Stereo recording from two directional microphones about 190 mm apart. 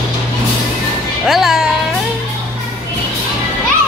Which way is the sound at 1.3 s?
Centre (ahead or behind).